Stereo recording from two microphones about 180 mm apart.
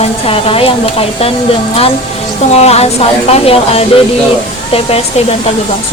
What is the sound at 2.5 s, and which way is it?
Speech, 35° left (ahead or behind).